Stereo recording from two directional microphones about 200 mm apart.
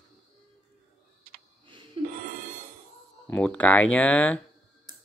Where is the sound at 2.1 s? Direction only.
50° right (ahead or behind).